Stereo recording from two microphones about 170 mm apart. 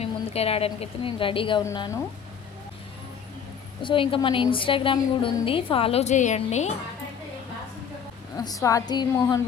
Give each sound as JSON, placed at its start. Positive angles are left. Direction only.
{"t": 0.0, "sound": "a woman's voice", "side_deg": 35}
{"t": 1.6, "sound": "a woman's voice", "side_deg": 20}
{"t": 3.8, "sound": "a woman's voice", "side_deg": 30}
{"t": 8.4, "sound": "a woman's voice", "side_deg": 20}